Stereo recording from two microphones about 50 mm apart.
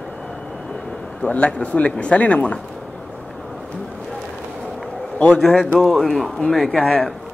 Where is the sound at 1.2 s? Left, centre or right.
Left.